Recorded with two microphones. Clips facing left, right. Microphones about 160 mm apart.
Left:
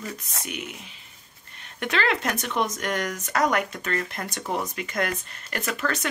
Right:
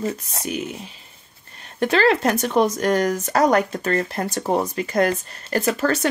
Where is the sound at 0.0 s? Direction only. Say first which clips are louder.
Right 9 dB; 30° right (ahead or behind).